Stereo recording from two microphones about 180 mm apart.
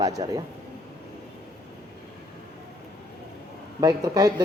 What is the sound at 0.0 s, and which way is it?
Speech, 20° right (ahead or behind).